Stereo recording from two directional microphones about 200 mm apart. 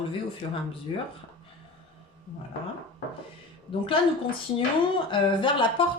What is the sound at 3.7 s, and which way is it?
Speech, 25° left (ahead or behind).